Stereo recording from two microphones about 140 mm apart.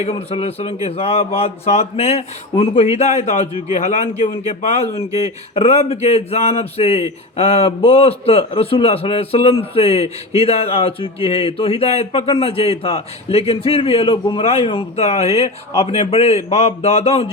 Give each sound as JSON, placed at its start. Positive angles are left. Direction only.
{"t": 0.0, "sound": "a man's voice", "side_deg": 45}